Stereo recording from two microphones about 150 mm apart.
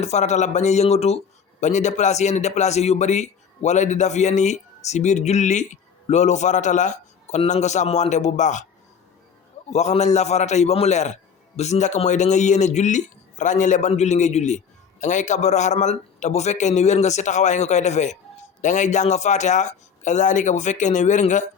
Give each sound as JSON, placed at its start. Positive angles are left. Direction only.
{"t": 0.0, "sound": "a man's voice", "side_deg": 50}
{"t": 9.6, "sound": "a man's voice", "side_deg": 50}